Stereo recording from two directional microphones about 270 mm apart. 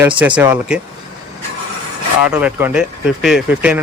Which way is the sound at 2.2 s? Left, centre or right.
Centre.